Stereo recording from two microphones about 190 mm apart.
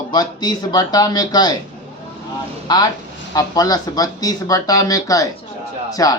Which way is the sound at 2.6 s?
20° left (ahead or behind).